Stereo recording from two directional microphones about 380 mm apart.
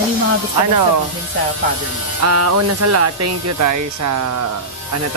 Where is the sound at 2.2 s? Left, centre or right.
Right.